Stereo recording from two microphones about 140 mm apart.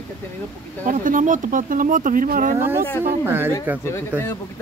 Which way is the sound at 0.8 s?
70° right (ahead or behind).